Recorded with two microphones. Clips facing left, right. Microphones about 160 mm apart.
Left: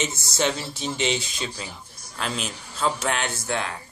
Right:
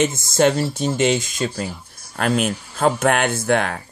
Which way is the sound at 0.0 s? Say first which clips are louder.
Right 9 dB; 50° right (ahead or behind).